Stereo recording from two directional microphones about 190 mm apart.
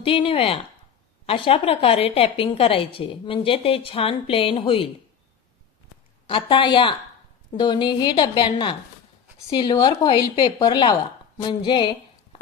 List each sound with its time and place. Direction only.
0.0 s a woman's voice: 30° left (ahead or behind)
6.2 s a woman's voice: 25° left (ahead or behind)